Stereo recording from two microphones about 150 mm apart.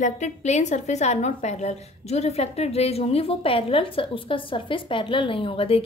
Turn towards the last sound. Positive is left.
turn(degrees=40)  # may be behind; listen again after turning